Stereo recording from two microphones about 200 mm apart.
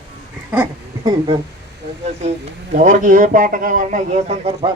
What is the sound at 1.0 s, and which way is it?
Speech, 25° right (ahead or behind).